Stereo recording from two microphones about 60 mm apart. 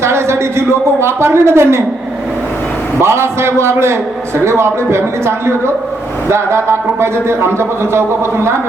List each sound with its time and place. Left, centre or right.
0.0 s speech: right
3.0 s speech: right